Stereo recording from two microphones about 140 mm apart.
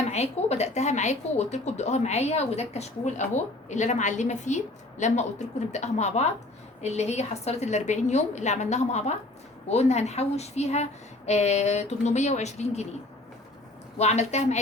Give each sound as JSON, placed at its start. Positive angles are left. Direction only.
{"t": 0.0, "sound": "a woman's voice", "side_deg": 50}
{"t": 14.0, "sound": "a woman's voice", "side_deg": 50}